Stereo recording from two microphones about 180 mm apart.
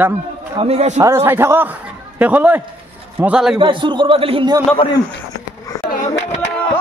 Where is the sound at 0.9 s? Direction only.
15° right (ahead or behind).